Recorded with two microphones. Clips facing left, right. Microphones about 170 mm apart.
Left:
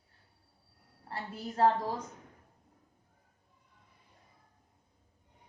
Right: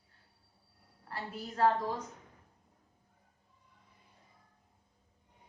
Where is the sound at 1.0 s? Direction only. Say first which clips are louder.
Left 2 dB; 30° left (ahead or behind).